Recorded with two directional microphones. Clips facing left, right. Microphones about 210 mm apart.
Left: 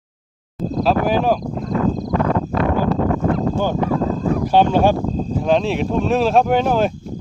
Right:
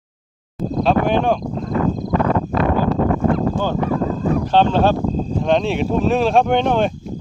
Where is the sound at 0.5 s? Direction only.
Centre (ahead or behind).